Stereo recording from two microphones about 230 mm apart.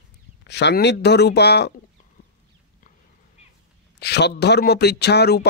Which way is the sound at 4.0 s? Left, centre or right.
Left.